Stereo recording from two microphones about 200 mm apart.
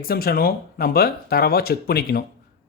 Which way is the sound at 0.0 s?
50° left (ahead or behind).